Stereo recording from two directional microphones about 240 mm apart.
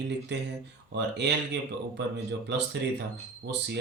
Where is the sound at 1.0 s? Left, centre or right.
Right.